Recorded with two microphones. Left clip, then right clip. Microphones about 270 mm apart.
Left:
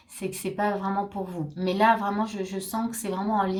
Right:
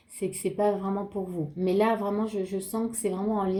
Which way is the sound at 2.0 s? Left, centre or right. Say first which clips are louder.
Left 1 dB; left.